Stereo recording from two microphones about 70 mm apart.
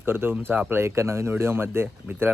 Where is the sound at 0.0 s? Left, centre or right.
Right.